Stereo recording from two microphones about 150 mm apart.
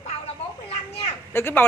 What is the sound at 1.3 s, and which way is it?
Speech, 15° left (ahead or behind).